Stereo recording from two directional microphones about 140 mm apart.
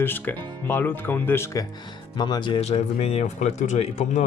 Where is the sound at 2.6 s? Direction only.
50° left (ahead or behind).